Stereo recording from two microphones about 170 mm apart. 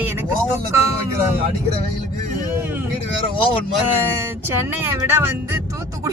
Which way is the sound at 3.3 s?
30° left (ahead or behind).